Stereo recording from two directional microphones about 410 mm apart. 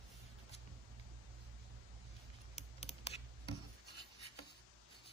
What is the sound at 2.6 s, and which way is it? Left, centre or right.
Scissors, centre.